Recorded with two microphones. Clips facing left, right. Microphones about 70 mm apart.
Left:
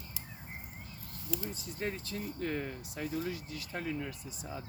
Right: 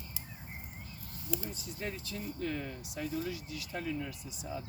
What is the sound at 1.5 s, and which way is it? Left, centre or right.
Speech, left.